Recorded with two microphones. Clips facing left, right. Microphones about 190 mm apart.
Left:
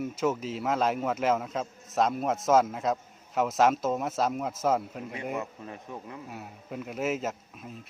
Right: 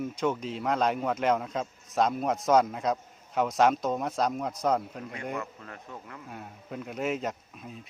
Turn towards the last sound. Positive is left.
turn(degrees=0)  # may be behind; listen again after turning